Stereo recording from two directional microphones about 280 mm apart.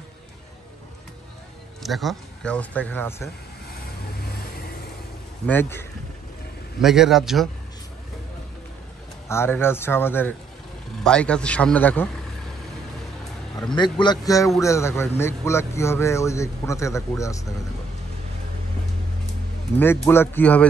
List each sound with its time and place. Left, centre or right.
1.8 s speech: centre
5.5 s a man's voice: centre
9.3 s a man's voice: centre
13.7 s a man's voice: centre
19.8 s a man's voice: centre